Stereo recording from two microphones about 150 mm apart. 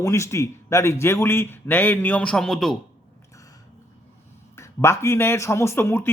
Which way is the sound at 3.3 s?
20° left (ahead or behind).